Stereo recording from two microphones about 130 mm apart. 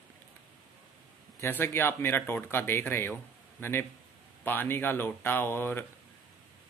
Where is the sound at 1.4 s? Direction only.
15° left (ahead or behind).